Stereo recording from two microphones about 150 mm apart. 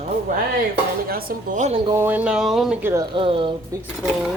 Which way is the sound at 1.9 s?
15° right (ahead or behind).